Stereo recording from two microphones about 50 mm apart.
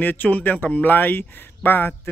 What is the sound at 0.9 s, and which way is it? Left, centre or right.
A man's voice, left.